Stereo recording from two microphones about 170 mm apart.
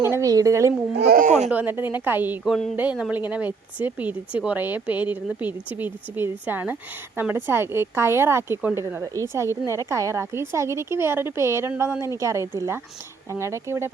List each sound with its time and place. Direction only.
0.0 s a woman's voice: 15° right (ahead or behind)
0.9 s speech: 65° right (ahead or behind); by 1.5 s 45° right (ahead or behind)
1.5 s speech: 10° right (ahead or behind)
2.4 s speech: centre (ahead or behind); by 13.9 s 15° right (ahead or behind)